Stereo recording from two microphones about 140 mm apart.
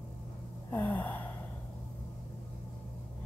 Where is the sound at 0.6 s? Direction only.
15° left (ahead or behind).